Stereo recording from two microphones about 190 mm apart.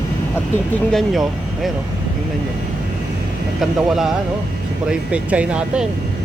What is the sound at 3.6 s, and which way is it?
Speech, centre (ahead or behind).